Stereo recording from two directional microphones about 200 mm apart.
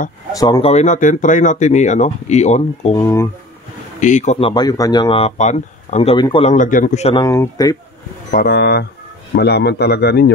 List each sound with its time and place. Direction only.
0.4 s speech: 25° left (ahead or behind)
3.0 s speech: 10° left (ahead or behind)
4.0 s speech: 35° left (ahead or behind)
7.2 s speech: 15° left (ahead or behind)
8.5 s a man's voice: 55° left (ahead or behind)